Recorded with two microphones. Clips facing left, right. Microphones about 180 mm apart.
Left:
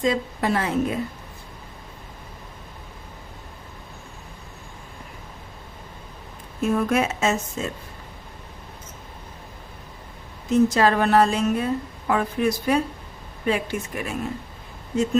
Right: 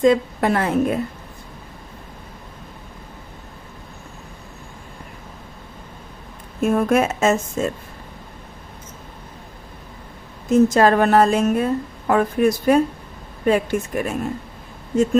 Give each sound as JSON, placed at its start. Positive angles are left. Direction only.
{"t": 0.0, "sound": "a woman's voice", "side_deg": -55}
{"t": 6.6, "sound": "a woman's voice", "side_deg": -50}
{"t": 10.5, "sound": "a woman's voice", "side_deg": -50}